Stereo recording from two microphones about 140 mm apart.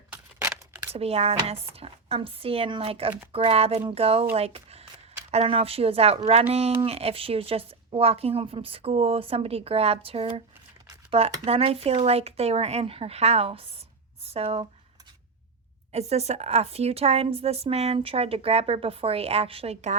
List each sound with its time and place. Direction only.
0.1 s a sound: 15° right (ahead or behind)
0.9 s a woman's voice: 45° right (ahead or behind)
15.9 s a woman's voice: 50° right (ahead or behind)